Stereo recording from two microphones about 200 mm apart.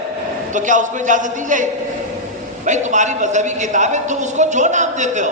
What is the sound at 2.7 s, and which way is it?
A woman's voice, 35° right (ahead or behind).